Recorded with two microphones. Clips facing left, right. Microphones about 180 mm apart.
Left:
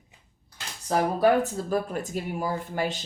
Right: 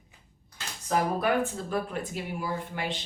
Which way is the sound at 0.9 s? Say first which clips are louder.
Left 5 dB; 35° left (ahead or behind).